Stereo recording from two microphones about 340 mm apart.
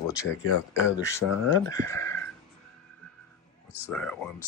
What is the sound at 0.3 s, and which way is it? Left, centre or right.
Speech, left.